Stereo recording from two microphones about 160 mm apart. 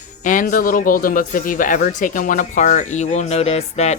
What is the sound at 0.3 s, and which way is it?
Speech, 55° left (ahead or behind).